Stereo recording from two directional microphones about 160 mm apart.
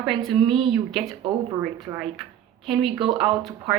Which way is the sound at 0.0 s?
Centre (ahead or behind).